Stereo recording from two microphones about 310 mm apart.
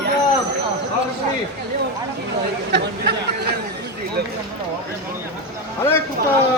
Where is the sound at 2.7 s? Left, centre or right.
Right.